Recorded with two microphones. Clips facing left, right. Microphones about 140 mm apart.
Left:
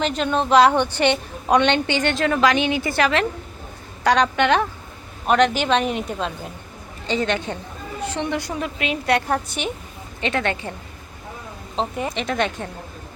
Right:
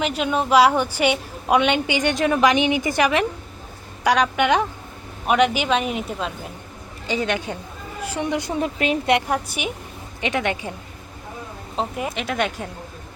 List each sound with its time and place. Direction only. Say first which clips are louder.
0.0 s a woman's voice: left 1 dB; 10° right (ahead or behind); by 9.0 s 30° right (ahead or behind)
9.0 s a woman's voice: right 1 dB; 15° right (ahead or behind)
11.8 s a woman's voice: left 1 dB; 5° right (ahead or behind)